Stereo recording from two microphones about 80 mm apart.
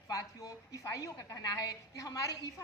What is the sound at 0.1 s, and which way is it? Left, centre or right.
A woman's voice, left.